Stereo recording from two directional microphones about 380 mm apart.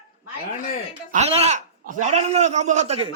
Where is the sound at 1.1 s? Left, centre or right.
Centre.